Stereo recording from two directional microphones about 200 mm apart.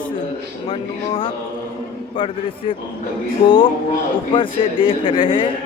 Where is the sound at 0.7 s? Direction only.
25° left (ahead or behind).